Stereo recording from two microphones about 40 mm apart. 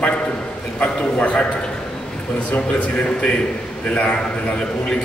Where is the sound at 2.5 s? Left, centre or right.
Left.